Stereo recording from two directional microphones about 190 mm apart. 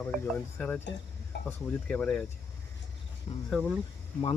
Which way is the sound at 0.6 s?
10° left (ahead or behind).